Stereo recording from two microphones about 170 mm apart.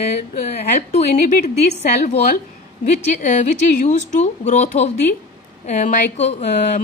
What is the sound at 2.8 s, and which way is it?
A woman's voice, 45° left (ahead or behind).